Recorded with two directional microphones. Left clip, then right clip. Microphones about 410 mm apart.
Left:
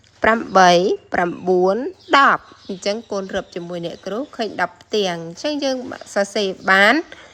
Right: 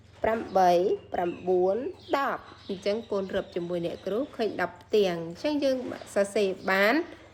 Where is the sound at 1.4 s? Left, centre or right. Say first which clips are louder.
Left 8 dB; left.